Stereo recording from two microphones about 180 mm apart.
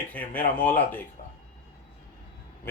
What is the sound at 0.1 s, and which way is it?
Speech, 10° left (ahead or behind).